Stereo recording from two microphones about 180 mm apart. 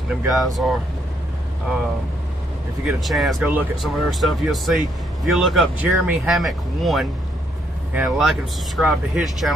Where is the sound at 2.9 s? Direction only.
Centre (ahead or behind).